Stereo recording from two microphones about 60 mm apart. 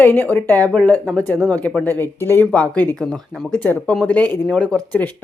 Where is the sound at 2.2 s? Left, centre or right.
Left.